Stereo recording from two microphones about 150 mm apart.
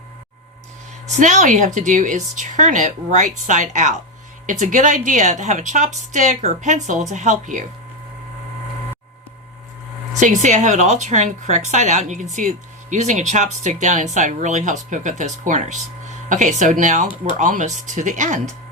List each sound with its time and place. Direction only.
1.1 s a woman's voice: 55° right (ahead or behind)
10.2 s a woman's voice: 55° right (ahead or behind)